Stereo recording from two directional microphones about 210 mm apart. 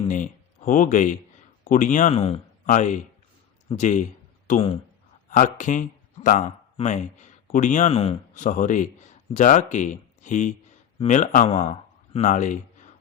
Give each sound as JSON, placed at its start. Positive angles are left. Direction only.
{"t": 0.1, "sound": "speech", "side_deg": 40}